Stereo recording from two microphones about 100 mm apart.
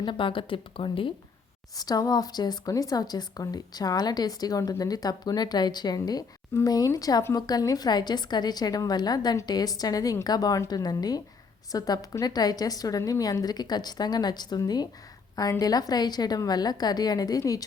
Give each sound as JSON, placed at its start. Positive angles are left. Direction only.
{"t": 0.0, "sound": "speech", "side_deg": 55}
{"t": 1.7, "sound": "a woman's voice", "side_deg": 40}